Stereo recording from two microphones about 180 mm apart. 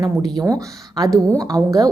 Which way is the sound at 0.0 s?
20° right (ahead or behind).